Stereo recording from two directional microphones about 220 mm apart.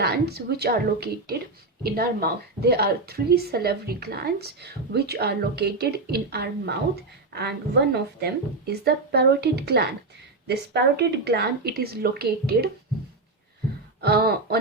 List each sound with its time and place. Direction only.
0.0 s a woman's voice: 45° right (ahead or behind)
8.2 s a woman's voice: 45° right (ahead or behind)
14.0 s a woman's voice: 45° right (ahead or behind)